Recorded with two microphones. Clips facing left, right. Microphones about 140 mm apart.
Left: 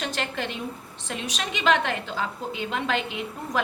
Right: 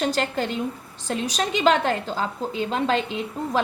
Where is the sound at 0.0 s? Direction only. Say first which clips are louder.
Right 6 dB; 35° right (ahead or behind).